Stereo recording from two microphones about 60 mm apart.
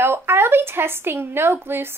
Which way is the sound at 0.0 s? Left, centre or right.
Right.